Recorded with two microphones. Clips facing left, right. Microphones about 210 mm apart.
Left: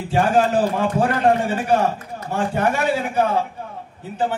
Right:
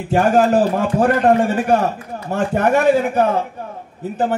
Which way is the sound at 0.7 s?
50° right (ahead or behind).